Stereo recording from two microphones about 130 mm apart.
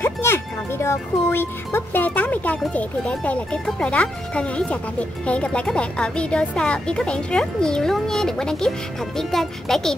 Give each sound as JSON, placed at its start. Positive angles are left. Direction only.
{"t": 0.0, "sound": "speech", "side_deg": 20}